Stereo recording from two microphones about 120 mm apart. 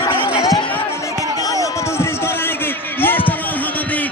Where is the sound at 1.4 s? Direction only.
30° left (ahead or behind).